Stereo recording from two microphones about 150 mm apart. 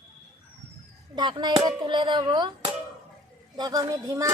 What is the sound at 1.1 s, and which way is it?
Speech, 30° right (ahead or behind).